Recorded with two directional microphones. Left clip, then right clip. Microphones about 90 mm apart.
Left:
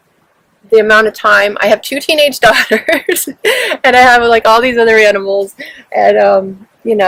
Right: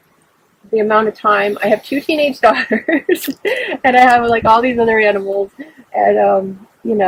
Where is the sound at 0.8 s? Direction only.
30° left (ahead or behind).